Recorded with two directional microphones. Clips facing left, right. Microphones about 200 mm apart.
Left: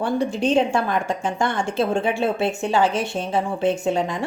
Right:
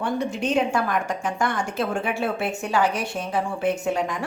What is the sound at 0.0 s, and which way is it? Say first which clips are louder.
A woman's voice: left 4 dB; 30° left (ahead or behind).